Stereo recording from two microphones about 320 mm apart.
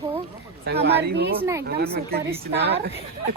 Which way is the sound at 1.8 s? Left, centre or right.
Right.